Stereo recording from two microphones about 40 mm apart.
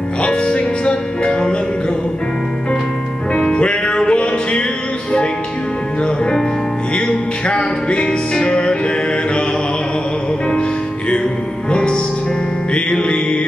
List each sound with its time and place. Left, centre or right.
0.2 s music: left
3.3 s music: left
7.0 s music: left
11.7 s music: left